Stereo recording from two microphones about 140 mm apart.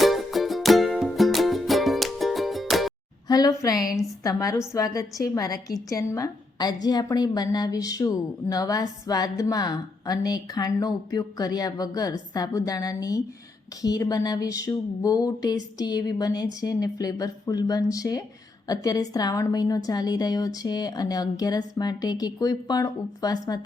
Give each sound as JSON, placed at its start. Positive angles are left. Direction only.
{"t": 0.0, "sound": "music", "side_deg": 0}
{"t": 3.2, "sound": "a woman's voice", "side_deg": 25}